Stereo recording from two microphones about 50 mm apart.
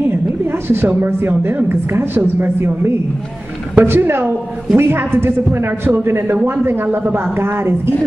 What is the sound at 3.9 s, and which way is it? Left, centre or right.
A woman's voice, right.